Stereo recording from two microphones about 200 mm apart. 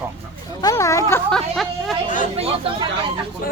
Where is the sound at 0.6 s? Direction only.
15° left (ahead or behind).